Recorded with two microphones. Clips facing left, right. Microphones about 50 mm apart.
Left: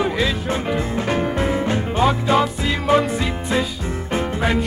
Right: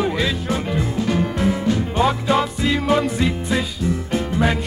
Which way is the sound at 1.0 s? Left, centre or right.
Left.